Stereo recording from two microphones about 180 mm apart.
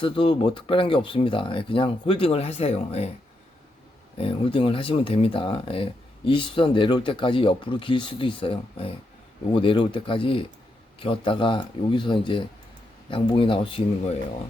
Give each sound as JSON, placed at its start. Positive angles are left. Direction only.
{"t": 0.0, "sound": "speech", "side_deg": 30}
{"t": 4.2, "sound": "speech", "side_deg": 30}